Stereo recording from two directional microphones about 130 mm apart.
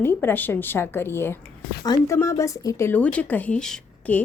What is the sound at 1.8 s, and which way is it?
A woman's voice, 30° left (ahead or behind).